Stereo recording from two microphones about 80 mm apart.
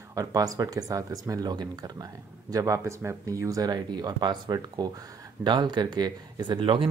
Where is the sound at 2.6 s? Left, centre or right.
Right.